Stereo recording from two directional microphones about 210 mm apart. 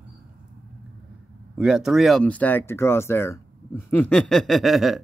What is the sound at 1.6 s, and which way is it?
Speech, centre (ahead or behind).